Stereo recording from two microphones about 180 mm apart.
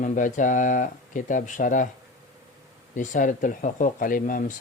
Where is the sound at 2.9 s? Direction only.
45° left (ahead or behind).